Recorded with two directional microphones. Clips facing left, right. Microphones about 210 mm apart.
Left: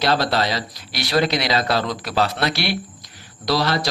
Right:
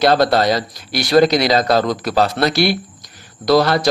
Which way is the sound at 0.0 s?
50° right (ahead or behind).